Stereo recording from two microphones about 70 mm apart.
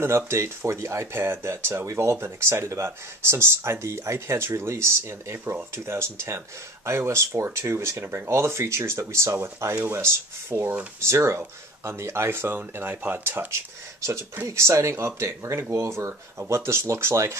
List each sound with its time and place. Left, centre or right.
0.0 s speech: right